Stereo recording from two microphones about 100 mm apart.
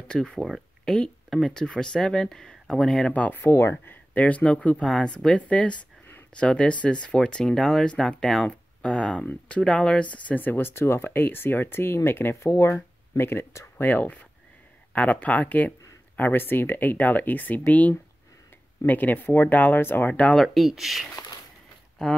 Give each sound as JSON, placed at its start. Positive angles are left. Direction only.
{"t": 0.1, "sound": "speech", "side_deg": 5}
{"t": 3.1, "sound": "speech", "side_deg": 15}
{"t": 20.3, "sound": "speech", "side_deg": 0}